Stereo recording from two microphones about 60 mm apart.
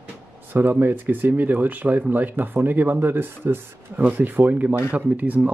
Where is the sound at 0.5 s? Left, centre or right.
Right.